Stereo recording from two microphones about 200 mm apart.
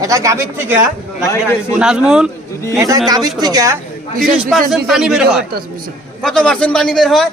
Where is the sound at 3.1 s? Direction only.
20° right (ahead or behind).